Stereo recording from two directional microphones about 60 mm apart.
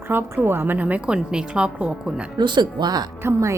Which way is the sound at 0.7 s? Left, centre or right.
Right.